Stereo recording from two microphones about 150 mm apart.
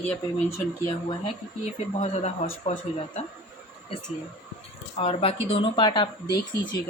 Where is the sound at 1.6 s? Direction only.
50° left (ahead or behind).